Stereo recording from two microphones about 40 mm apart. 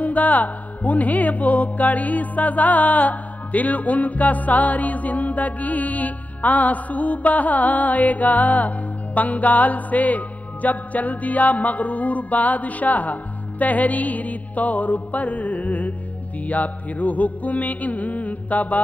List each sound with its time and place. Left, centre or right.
0.0 s music: left